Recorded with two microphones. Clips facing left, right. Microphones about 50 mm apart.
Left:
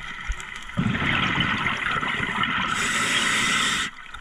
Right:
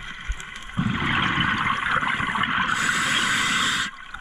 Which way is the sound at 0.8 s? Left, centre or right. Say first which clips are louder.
Even; left.